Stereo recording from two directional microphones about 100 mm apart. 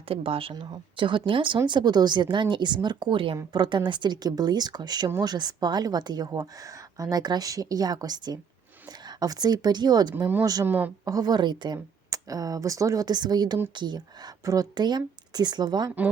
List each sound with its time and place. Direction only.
0.1 s speech: 70° right (ahead or behind)
0.6 s speech: 55° right (ahead or behind)
3.5 s a woman's voice: 45° right (ahead or behind)
10.7 s a woman's voice: 20° right (ahead or behind)
11.0 s speech: 40° right (ahead or behind)
12.1 s a woman's voice: 35° right (ahead or behind)